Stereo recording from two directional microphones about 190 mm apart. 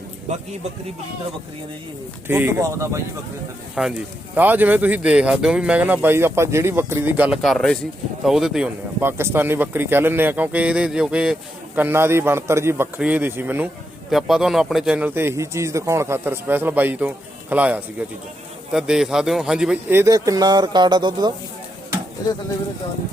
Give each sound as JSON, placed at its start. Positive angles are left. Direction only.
{"t": 2.2, "sound": "speech", "side_deg": -10}
{"t": 3.8, "sound": "speech", "side_deg": -5}